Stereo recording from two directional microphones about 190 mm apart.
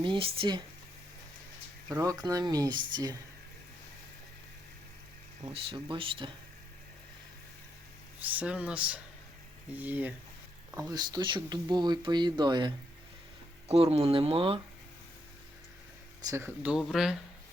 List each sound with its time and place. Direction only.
0.0 s speech: 25° right (ahead or behind)
1.9 s speech: 20° right (ahead or behind)
5.4 s speech: 30° right (ahead or behind)
8.2 s speech: 10° right (ahead or behind)
10.8 s speech: 20° right (ahead or behind)
16.2 s speech: 15° right (ahead or behind)
16.7 s speech: centre (ahead or behind)